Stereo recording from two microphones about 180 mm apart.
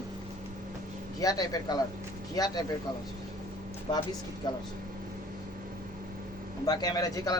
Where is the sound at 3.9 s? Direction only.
25° left (ahead or behind).